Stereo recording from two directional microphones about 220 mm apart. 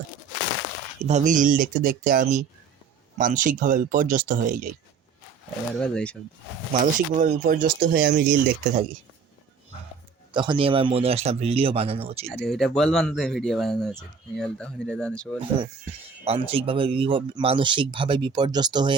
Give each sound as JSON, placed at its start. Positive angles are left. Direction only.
{"t": 1.0, "sound": "speech", "side_deg": -35}
{"t": 5.7, "sound": "speech", "side_deg": 5}
{"t": 6.7, "sound": "speech", "side_deg": -40}
{"t": 10.3, "sound": "speech", "side_deg": -20}
{"t": 12.2, "sound": "speech", "side_deg": 0}
{"t": 15.4, "sound": "speech", "side_deg": -25}